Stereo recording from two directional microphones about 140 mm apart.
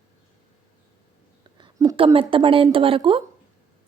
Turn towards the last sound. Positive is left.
turn(degrees=-40)  # may be behind; listen again after turning